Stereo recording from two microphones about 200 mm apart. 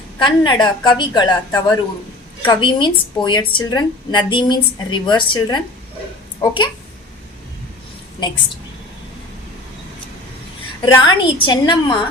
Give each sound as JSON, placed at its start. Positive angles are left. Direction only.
{"t": 0.2, "sound": "a woman's voice", "side_deg": 25}
{"t": 10.8, "sound": "a woman's voice", "side_deg": 20}